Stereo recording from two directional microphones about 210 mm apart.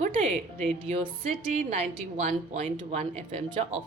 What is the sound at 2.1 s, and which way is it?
A woman's voice, 30° right (ahead or behind).